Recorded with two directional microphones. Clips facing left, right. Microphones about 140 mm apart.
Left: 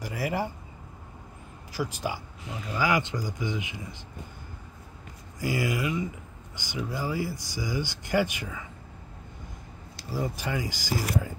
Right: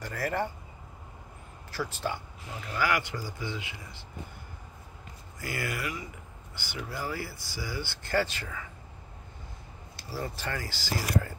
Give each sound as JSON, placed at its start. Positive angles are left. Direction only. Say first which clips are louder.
{"t": 0.0, "sound": "speech", "louder": "left 1 dB", "side_deg": 10}
{"t": 1.7, "sound": "speech", "louder": "left 2 dB", "side_deg": 15}
{"t": 5.4, "sound": "speech", "louder": "left 6 dB", "side_deg": 15}
{"t": 10.0, "sound": "speech", "louder": "left 4 dB", "side_deg": 15}